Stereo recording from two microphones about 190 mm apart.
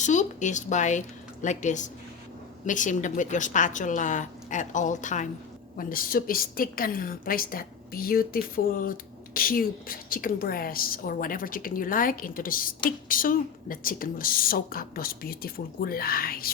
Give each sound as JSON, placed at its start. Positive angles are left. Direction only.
{"t": 0.0, "sound": "a woman's voice", "side_deg": 40}